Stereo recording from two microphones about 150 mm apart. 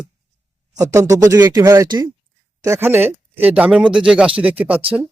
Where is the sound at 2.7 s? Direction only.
15° right (ahead or behind).